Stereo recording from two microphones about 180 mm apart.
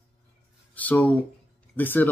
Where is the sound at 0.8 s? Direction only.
10° left (ahead or behind).